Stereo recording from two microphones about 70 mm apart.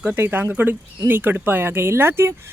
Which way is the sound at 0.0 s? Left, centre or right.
Right.